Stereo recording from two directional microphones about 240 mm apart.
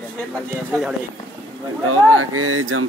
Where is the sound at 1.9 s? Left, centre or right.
Right.